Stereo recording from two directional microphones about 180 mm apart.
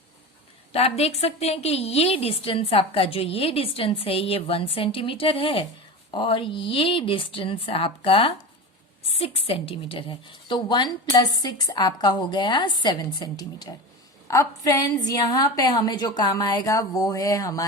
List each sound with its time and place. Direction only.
0.7 s a woman's voice: 35° left (ahead or behind); by 17.7 s 20° left (ahead or behind)